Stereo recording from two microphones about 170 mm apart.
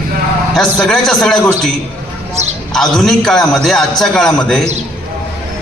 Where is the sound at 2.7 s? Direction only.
5° left (ahead or behind).